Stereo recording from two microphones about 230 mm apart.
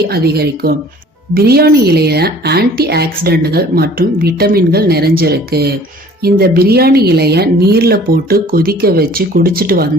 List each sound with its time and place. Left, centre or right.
0.1 s a woman's voice: right